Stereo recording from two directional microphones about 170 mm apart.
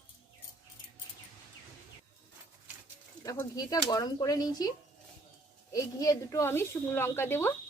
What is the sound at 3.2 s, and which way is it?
A woman's voice, 20° left (ahead or behind).